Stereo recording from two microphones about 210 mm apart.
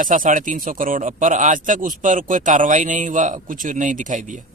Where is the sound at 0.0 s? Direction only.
40° right (ahead or behind).